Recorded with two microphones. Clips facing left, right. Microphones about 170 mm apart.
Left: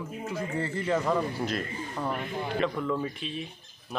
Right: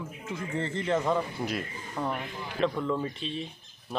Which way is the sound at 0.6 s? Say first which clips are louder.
Right 1 dB; 10° left (ahead or behind).